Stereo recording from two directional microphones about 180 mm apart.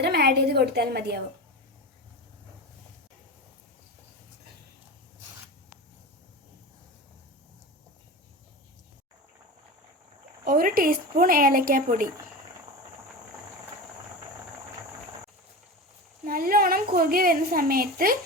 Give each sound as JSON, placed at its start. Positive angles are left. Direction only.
{"t": 0.0, "sound": "a woman's voice", "side_deg": -65}
{"t": 10.4, "sound": "a woman's voice", "side_deg": -50}
{"t": 16.2, "sound": "a woman's voice", "side_deg": -50}